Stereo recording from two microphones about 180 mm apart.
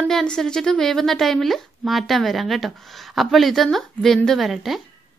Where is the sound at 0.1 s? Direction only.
5° left (ahead or behind).